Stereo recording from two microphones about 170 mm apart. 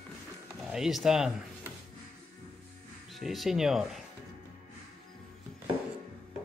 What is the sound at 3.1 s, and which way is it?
Speech, centre (ahead or behind).